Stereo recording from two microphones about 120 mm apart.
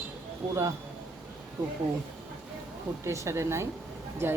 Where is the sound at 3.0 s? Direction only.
25° right (ahead or behind).